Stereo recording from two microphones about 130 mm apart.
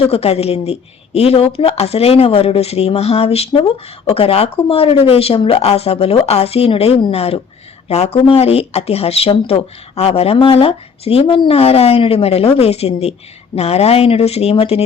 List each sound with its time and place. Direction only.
0.0 s speech: 50° left (ahead or behind)